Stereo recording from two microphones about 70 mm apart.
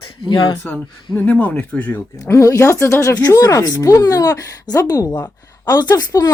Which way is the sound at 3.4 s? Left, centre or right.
Left.